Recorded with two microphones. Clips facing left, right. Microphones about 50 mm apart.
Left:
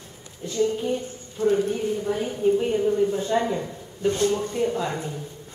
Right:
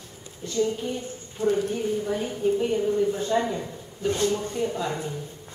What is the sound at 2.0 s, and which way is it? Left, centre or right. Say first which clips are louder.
A woman's voice: left 3 dB; centre.